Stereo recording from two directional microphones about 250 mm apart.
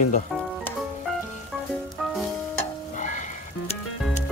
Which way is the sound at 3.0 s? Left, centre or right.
Left.